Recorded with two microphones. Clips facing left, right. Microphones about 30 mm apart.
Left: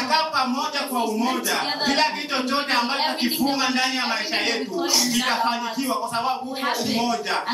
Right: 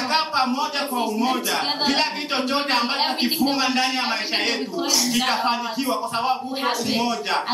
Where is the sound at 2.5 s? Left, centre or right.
Centre.